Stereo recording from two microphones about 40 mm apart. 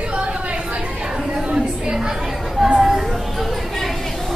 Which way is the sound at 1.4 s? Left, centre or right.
Centre.